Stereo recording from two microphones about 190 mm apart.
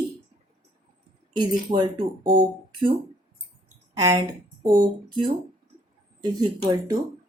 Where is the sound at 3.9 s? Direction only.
20° right (ahead or behind).